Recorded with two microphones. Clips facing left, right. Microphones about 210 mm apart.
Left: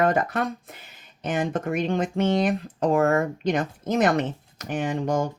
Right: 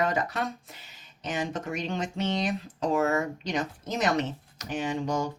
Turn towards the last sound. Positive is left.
turn(degrees=55)  # may be behind; listen again after turning